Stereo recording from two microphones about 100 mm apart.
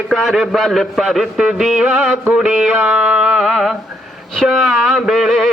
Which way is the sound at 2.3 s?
5° right (ahead or behind).